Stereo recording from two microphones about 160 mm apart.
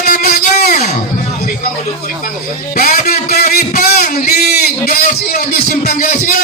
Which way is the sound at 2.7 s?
55° left (ahead or behind).